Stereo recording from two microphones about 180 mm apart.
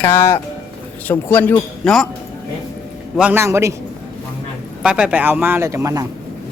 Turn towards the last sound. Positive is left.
turn(degrees=-15)  # may be behind; listen again after turning